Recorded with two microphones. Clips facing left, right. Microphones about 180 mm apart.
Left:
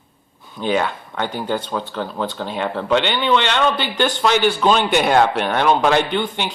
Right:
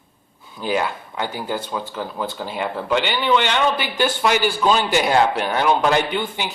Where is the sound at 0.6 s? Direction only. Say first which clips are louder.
Left 2 dB; 5° right (ahead or behind).